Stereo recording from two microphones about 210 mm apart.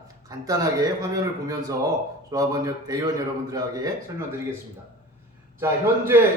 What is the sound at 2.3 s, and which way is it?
Speech, 15° right (ahead or behind).